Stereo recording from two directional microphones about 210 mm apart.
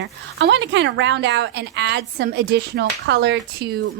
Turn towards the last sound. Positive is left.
turn(degrees=-55)  # may be behind; listen again after turning